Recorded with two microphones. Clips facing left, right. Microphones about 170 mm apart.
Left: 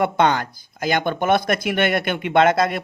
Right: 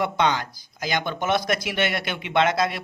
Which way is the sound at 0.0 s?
50° left (ahead or behind).